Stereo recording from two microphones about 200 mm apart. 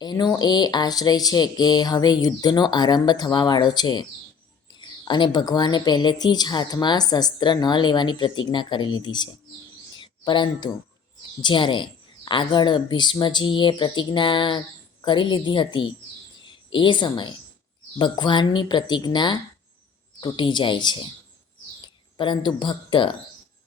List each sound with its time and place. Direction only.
0.0 s speech: 20° left (ahead or behind)
10.0 s a sound: 20° left (ahead or behind)
11.4 s speech: 25° left (ahead or behind)
22.2 s speech: 25° left (ahead or behind)